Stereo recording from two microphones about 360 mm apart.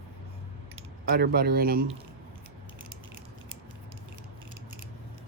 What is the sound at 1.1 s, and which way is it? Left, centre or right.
Speech, right.